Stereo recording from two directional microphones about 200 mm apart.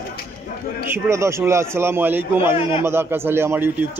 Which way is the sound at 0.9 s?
10° right (ahead or behind).